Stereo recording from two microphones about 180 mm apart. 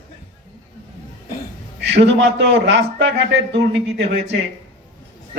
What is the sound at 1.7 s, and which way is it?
A man's voice, 75° right (ahead or behind).